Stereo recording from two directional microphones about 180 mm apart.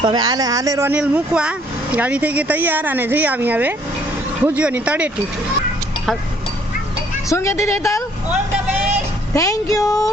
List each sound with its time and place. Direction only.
0.0 s speech: 25° right (ahead or behind); by 5.1 s 5° right (ahead or behind)
7.3 s speech: 15° left (ahead or behind)
8.7 s vehicle: 10° right (ahead or behind)
9.3 s a woman's voice: 20° left (ahead or behind)